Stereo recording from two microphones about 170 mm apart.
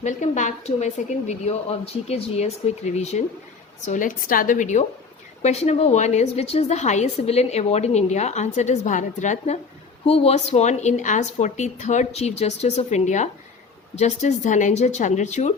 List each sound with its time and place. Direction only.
0.0 s a woman's voice: 45° left (ahead or behind)